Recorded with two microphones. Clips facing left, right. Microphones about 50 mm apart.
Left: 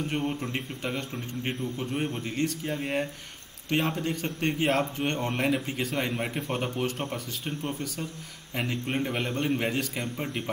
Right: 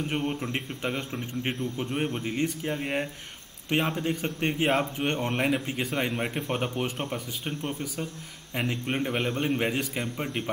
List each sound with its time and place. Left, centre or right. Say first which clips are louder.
0.1 s a man's voice: right 1 dB; centre